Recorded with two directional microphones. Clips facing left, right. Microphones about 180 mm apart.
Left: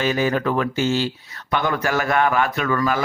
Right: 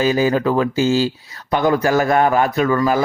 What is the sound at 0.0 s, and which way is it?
Speech, 35° right (ahead or behind).